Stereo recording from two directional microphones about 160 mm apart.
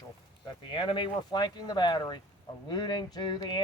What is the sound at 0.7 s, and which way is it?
Speech, 30° left (ahead or behind).